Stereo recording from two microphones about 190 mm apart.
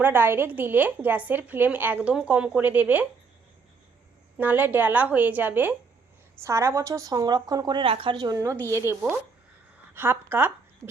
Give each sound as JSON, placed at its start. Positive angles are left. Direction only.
{"t": 0.0, "sound": "a woman's voice", "side_deg": -10}
{"t": 4.4, "sound": "a woman's voice", "side_deg": -10}